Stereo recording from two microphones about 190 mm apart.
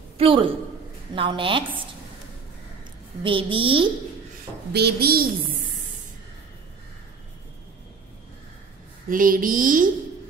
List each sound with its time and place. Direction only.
0.2 s a woman's voice: 25° right (ahead or behind)
3.3 s a woman's voice: 25° right (ahead or behind)
4.7 s a child's voice: 55° right (ahead or behind)
9.1 s a child's voice: 45° right (ahead or behind)